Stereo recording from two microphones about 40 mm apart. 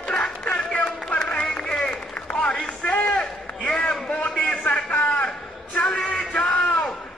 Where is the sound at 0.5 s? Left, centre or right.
Left.